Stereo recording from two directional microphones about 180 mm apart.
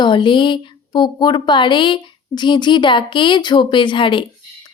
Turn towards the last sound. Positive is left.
turn(degrees=25)  # may be behind; listen again after turning